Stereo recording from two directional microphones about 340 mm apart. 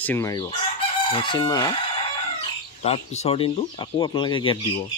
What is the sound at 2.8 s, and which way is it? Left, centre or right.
Speech, centre.